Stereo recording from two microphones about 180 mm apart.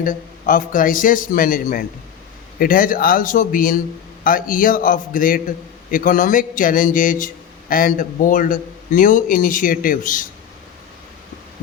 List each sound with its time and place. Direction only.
0.0 s a man's voice: 50° left (ahead or behind)